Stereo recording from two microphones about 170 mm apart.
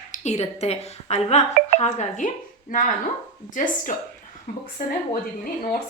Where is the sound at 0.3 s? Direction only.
40° left (ahead or behind).